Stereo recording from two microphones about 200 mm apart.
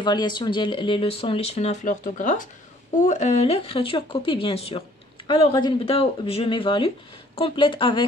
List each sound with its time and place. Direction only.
0.0 s speech: 20° left (ahead or behind)